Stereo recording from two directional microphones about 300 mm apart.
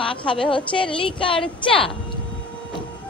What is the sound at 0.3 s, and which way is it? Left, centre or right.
A woman's voice, centre.